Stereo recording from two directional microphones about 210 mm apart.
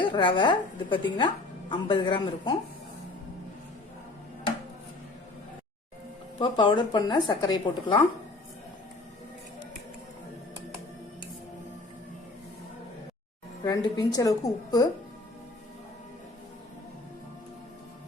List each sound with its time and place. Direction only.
0.0 s speech: 25° left (ahead or behind)
6.4 s speech: 25° left (ahead or behind)
13.7 s a woman's voice: 20° left (ahead or behind)